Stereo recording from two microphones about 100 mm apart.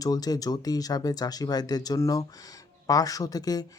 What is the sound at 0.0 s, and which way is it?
Speech, 40° left (ahead or behind).